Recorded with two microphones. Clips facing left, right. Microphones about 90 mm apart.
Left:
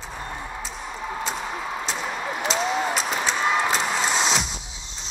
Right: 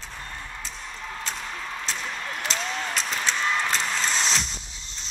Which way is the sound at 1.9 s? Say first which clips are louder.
Left 3 dB; 15° left (ahead or behind).